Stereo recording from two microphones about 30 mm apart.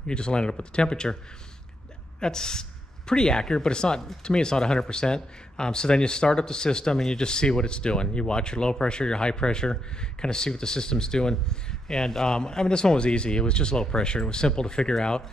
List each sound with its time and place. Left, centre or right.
0.0 s speech: left
2.1 s speech: left